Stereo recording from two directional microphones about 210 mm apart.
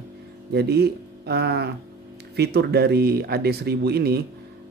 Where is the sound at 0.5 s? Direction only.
50° right (ahead or behind).